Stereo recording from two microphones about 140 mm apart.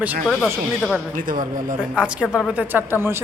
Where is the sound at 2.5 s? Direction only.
10° right (ahead or behind).